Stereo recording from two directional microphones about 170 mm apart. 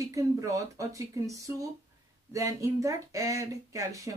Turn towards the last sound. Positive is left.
turn(degrees=-20)  # may be behind; listen again after turning